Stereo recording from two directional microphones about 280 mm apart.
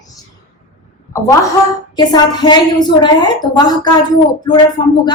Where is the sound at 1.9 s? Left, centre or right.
Centre.